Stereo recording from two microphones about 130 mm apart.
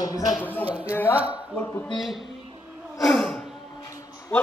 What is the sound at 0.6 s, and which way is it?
Speech, 10° right (ahead or behind).